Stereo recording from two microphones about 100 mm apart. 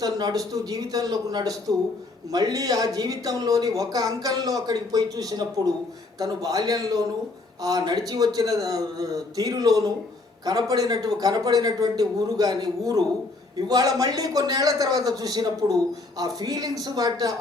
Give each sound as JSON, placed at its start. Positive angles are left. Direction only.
{"t": 0.0, "sound": "a man's voice", "side_deg": -40}